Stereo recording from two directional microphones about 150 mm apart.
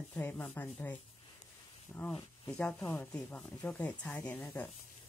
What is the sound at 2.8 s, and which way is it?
Speech, 20° left (ahead or behind).